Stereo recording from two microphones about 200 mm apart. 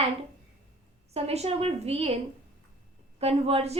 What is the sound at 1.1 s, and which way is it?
A woman's voice, 30° right (ahead or behind).